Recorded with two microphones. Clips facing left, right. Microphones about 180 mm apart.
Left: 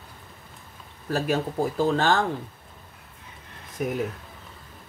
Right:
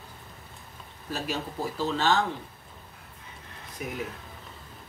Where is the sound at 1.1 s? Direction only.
55° left (ahead or behind).